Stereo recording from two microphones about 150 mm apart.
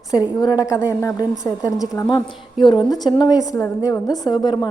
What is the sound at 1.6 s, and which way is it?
Speech, centre (ahead or behind).